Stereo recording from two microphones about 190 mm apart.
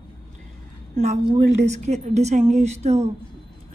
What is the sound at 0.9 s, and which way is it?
A woman's voice, 35° right (ahead or behind).